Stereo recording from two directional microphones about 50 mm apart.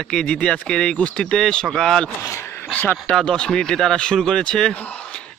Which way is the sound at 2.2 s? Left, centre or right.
Left.